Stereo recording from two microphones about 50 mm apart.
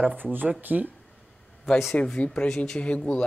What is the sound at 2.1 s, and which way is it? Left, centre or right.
Speech, centre.